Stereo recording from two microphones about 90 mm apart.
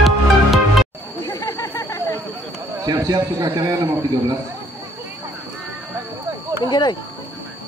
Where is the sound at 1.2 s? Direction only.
30° left (ahead or behind).